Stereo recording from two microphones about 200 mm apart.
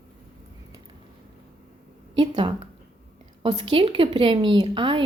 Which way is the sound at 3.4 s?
25° right (ahead or behind).